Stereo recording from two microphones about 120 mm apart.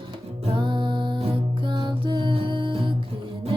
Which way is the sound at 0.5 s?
40° right (ahead or behind).